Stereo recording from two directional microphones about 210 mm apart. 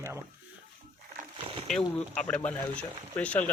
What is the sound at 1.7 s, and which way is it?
Speech, 5° left (ahead or behind).